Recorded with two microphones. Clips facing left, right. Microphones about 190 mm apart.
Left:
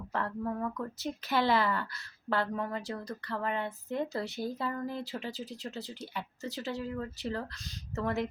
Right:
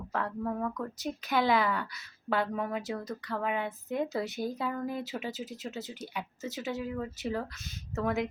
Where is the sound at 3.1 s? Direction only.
Centre (ahead or behind).